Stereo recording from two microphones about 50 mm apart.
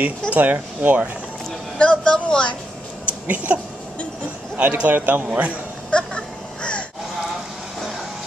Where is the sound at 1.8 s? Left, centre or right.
Centre.